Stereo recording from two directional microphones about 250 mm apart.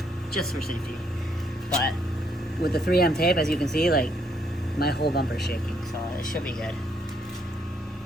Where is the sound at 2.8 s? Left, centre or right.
Left.